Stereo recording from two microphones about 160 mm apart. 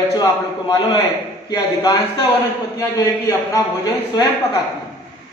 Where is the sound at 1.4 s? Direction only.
20° left (ahead or behind).